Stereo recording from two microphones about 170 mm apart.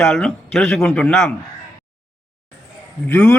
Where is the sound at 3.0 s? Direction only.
10° left (ahead or behind).